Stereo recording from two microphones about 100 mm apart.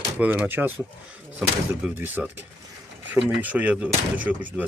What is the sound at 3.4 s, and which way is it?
Speech, 15° right (ahead or behind).